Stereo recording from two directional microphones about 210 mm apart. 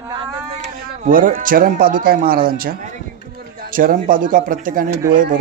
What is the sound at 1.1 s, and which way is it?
Speech, 40° right (ahead or behind).